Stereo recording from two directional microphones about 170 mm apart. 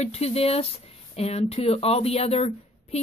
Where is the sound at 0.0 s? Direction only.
40° left (ahead or behind).